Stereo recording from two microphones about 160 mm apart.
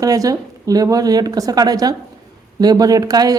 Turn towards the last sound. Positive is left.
turn(degrees=-25)  # may be behind; listen again after turning